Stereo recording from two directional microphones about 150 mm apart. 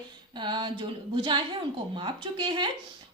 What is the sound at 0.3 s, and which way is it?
A woman's voice, 30° right (ahead or behind).